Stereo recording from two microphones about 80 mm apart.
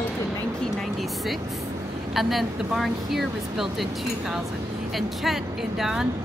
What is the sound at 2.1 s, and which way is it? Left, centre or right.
Speech, centre.